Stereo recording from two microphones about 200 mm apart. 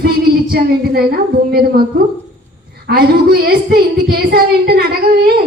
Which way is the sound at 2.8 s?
50° right (ahead or behind).